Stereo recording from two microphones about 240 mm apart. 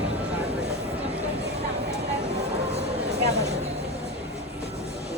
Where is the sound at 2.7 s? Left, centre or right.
Right.